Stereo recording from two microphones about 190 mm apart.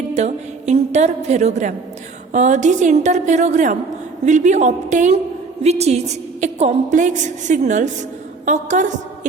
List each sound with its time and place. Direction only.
0.1 s a woman's voice: 35° right (ahead or behind)